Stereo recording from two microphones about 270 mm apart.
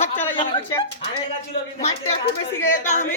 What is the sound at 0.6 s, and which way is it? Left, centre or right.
Speech, centre.